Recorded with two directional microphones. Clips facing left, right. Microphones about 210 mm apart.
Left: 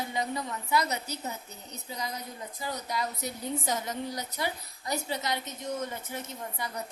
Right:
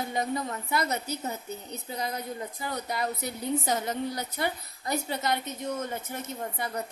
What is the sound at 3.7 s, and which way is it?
A woman's voice, 60° right (ahead or behind).